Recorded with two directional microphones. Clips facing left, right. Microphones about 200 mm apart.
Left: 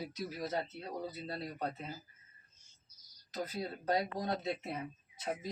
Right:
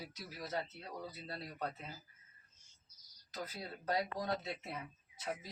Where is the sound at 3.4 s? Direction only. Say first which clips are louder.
Left 6 dB; 20° left (ahead or behind).